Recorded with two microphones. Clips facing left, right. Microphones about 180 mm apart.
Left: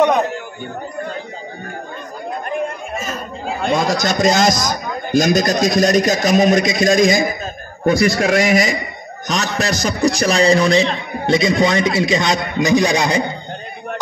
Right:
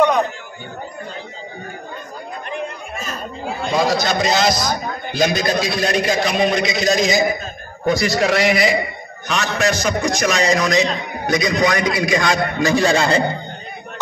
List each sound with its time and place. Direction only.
3.6 s a man's voice: 50° left (ahead or behind); by 13.2 s 15° left (ahead or behind)